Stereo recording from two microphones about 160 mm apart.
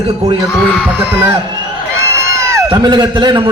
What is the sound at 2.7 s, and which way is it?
Speech, 30° right (ahead or behind).